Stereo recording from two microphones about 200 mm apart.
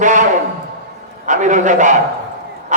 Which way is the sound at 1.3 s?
40° right (ahead or behind).